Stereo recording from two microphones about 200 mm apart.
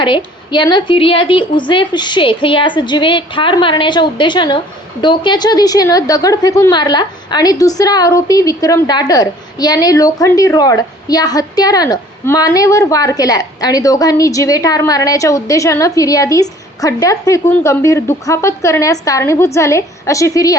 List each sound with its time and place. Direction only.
0.0 s a woman's voice: 25° left (ahead or behind)